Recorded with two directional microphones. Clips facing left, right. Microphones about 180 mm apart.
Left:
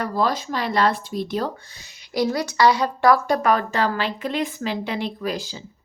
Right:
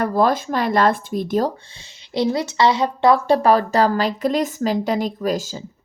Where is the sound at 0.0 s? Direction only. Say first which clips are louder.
Right 5 dB; 50° right (ahead or behind).